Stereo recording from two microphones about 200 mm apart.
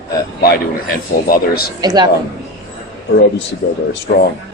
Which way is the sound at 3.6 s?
50° left (ahead or behind).